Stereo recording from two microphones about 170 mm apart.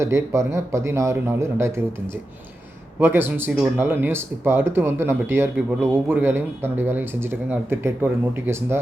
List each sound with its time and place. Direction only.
0.0 s speech: 15° right (ahead or behind)
3.0 s speech: 10° right (ahead or behind)